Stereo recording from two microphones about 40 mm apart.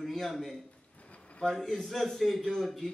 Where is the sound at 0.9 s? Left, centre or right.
Left.